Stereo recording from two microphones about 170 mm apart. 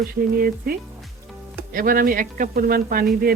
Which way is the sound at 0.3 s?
60° right (ahead or behind).